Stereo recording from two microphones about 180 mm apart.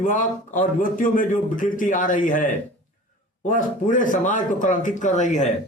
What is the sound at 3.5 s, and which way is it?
A man's voice, 45° left (ahead or behind).